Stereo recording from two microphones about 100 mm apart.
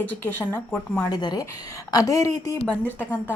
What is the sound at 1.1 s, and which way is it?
A woman's voice, 45° left (ahead or behind).